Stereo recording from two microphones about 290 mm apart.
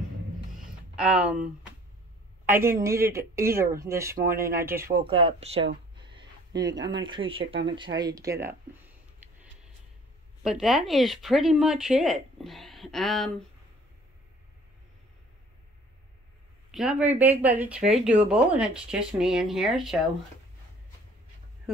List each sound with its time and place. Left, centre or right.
0.6 s music: centre
2.4 s speech: centre
7.7 s a sound: centre
10.4 s speech: centre
16.7 s speech: centre